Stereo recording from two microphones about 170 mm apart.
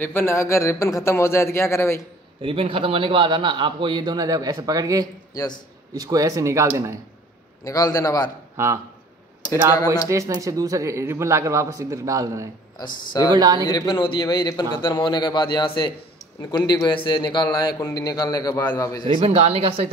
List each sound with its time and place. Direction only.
0.0 s speech: 15° left (ahead or behind)
2.4 s a man's voice: 30° right (ahead or behind)
5.3 s a man's voice: 20° left (ahead or behind)
5.9 s a man's voice: 20° right (ahead or behind)
7.6 s a man's voice: 20° left (ahead or behind)
8.6 s speech: 15° right (ahead or behind)
10.0 s a man's voice: 20° right (ahead or behind)
13.7 s a man's voice: 25° left (ahead or behind)
19.1 s speech: 35° right (ahead or behind)